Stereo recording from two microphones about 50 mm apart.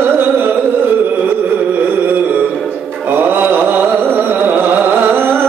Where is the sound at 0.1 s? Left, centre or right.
Right.